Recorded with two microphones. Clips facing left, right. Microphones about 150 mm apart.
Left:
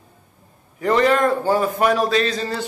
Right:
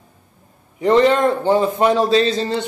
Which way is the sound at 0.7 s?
25° right (ahead or behind).